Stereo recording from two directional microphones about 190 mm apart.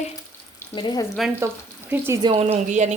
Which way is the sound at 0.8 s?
25° left (ahead or behind).